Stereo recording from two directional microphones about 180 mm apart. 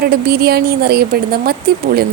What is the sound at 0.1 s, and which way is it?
A woman's voice, 60° right (ahead or behind).